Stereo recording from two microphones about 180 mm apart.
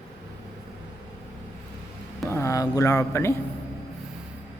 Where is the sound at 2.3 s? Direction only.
15° left (ahead or behind).